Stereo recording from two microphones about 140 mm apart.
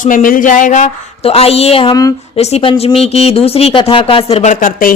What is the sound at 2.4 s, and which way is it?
Speech, 50° left (ahead or behind).